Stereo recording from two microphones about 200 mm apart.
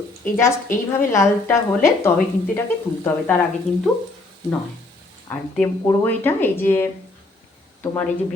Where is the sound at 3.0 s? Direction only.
10° left (ahead or behind).